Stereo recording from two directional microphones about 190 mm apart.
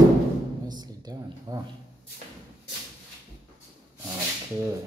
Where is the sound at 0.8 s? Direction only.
20° right (ahead or behind).